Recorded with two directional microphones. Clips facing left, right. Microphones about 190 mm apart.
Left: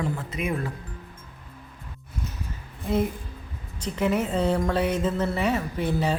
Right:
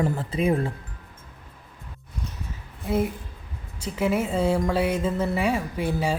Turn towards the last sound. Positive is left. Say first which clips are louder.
# even
turn(degrees=-10)  # may be behind; listen again after turning